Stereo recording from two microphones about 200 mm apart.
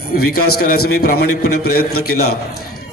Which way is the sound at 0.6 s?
50° left (ahead or behind).